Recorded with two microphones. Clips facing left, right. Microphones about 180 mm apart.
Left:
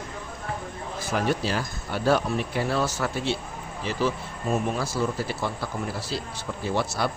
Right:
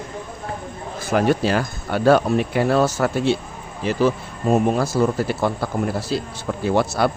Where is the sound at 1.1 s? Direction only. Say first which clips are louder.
Right 8 dB; 60° right (ahead or behind).